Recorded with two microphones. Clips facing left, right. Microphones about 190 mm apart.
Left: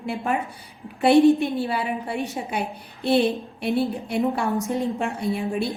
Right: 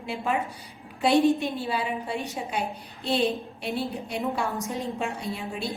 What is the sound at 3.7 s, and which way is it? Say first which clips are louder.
A woman's voice: left 7 dB; 55° left (ahead or behind).